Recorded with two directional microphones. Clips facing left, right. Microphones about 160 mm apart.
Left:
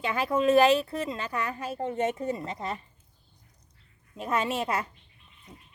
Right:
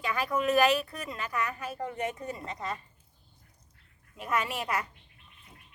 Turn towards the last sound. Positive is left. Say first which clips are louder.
# left 3 dB
turn(degrees=25)  # may be behind; listen again after turning